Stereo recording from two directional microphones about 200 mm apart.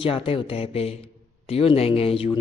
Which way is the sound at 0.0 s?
25° left (ahead or behind).